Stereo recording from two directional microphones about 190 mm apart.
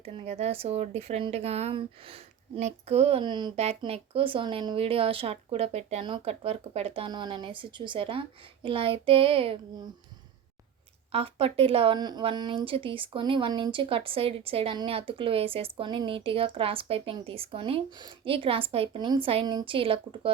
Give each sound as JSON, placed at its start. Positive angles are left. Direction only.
{"t": 0.0, "sound": "a woman's voice", "side_deg": -35}
{"t": 11.1, "sound": "a woman's voice", "side_deg": -30}